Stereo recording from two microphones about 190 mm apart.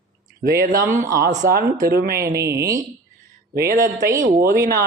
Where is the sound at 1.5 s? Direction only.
50° right (ahead or behind).